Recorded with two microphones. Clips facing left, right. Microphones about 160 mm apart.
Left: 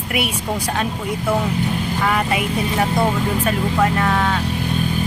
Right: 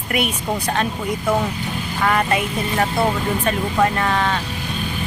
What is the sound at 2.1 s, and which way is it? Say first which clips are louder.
Speech: right 2 dB; 5° left (ahead or behind).